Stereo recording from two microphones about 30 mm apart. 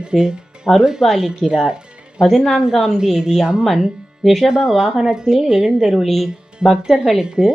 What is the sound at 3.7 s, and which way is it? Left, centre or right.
Speech, centre.